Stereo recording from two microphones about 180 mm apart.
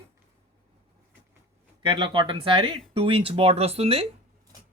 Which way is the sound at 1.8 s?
25° right (ahead or behind).